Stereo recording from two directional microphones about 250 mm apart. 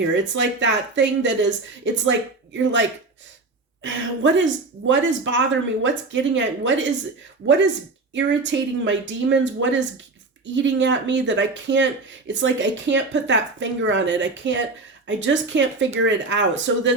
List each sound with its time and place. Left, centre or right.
0.1 s speech: right
3.8 s speech: right